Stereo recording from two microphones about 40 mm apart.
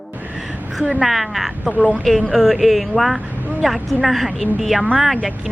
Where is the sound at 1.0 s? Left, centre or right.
Centre.